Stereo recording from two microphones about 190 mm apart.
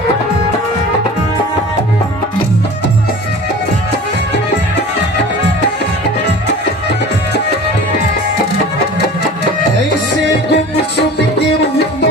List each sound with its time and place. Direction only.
10.5 s music: 60° left (ahead or behind)